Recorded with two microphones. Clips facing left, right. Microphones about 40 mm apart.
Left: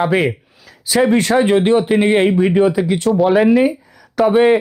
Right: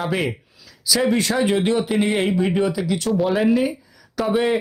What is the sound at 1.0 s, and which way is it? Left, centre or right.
Speech, left.